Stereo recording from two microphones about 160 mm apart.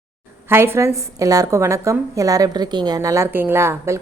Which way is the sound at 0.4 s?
15° right (ahead or behind).